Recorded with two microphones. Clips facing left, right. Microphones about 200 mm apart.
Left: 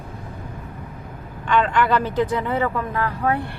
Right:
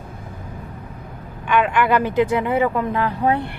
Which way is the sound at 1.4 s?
10° right (ahead or behind).